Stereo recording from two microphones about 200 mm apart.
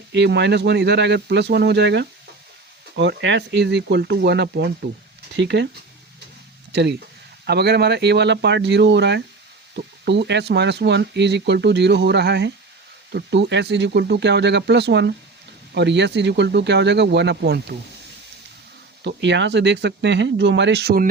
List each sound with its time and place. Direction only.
0.1 s speech: 60° right (ahead or behind)
7.4 s speech: 55° right (ahead or behind)
19.0 s speech: 60° right (ahead or behind)